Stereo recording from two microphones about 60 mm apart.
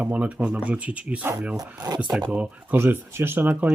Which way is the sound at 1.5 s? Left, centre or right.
Right.